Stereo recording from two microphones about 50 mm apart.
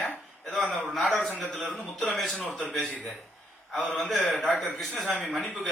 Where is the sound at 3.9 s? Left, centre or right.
Centre.